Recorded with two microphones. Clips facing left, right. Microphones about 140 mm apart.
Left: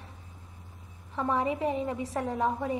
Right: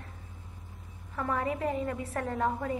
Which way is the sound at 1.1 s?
20° left (ahead or behind).